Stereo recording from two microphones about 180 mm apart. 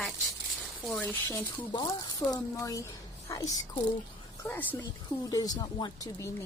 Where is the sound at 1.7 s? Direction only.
20° left (ahead or behind).